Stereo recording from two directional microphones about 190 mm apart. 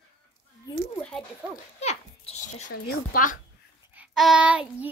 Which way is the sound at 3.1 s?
45° left (ahead or behind).